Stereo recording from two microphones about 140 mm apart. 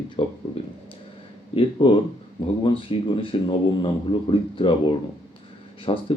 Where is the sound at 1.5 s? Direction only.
40° left (ahead or behind).